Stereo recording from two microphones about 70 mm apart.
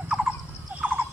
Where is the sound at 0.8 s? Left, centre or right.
Right.